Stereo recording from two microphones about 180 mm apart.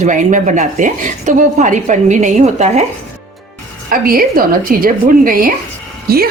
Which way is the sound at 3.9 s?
55° right (ahead or behind).